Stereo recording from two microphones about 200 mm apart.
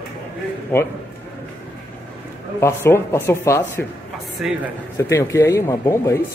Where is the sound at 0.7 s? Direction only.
10° left (ahead or behind).